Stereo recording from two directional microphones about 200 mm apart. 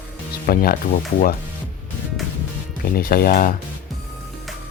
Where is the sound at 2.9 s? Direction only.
50° left (ahead or behind).